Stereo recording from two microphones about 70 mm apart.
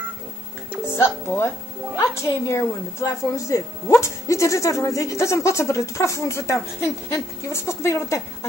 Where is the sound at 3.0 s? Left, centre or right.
Left.